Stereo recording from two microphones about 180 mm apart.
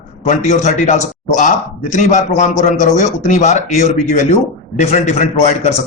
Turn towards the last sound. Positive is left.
turn(degrees=40)  # may be behind; listen again after turning